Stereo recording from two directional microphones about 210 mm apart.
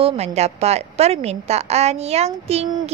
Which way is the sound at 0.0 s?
30° right (ahead or behind).